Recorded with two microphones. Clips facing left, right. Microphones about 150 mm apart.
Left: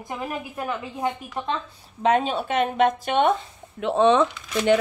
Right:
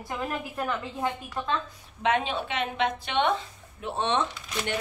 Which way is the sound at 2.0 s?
40° left (ahead or behind).